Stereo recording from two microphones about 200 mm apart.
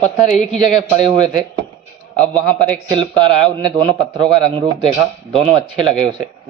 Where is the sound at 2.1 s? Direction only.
5° left (ahead or behind).